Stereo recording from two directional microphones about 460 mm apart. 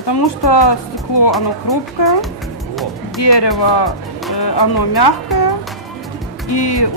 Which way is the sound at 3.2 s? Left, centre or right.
Left.